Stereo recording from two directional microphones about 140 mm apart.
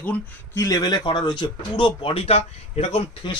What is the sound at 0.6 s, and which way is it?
Speech, 25° left (ahead or behind).